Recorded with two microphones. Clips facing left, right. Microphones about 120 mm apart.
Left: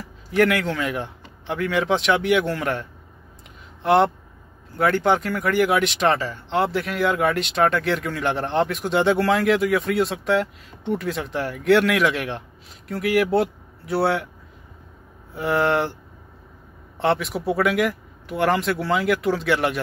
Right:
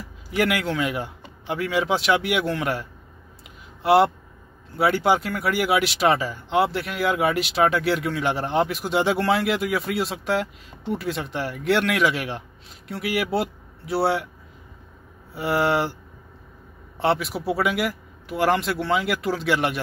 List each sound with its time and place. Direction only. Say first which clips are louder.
0.3 s speech: left 3 dB; 5° right (ahead or behind)
15.3 s speech: left 1 dB; 5° right (ahead or behind)
17.0 s speech: left 1 dB; centre (ahead or behind)